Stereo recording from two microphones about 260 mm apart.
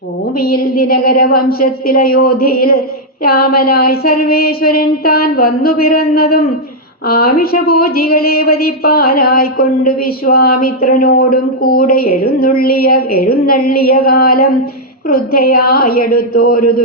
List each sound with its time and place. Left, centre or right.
0.3 s speech: left